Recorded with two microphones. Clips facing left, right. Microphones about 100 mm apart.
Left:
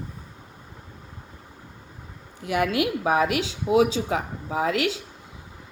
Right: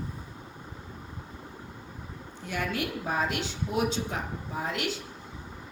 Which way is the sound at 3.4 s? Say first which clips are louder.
Left 9 dB; 90° left.